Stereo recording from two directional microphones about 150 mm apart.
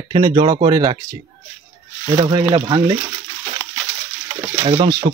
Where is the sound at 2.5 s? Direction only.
25° right (ahead or behind).